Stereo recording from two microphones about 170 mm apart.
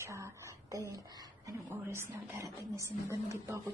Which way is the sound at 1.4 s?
15° right (ahead or behind).